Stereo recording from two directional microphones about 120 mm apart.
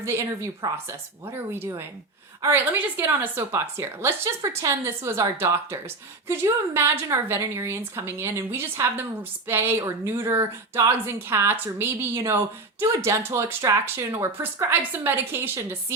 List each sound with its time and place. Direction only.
0.0 s a woman's voice: 20° right (ahead or behind)